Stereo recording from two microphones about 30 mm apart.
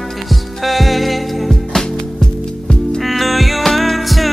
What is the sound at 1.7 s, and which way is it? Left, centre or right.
Music, centre.